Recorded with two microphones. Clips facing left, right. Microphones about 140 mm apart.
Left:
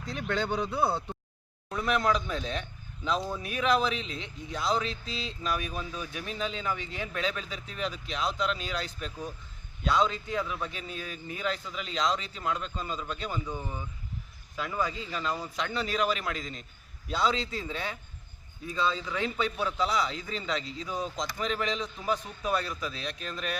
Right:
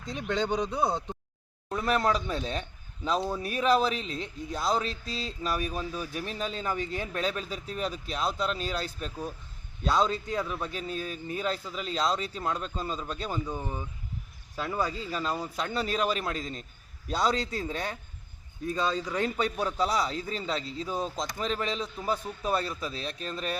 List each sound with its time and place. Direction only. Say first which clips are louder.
0.0 s speech: right 1 dB; 20° right (ahead or behind)
1.9 s speech: right 1 dB; 35° right (ahead or behind)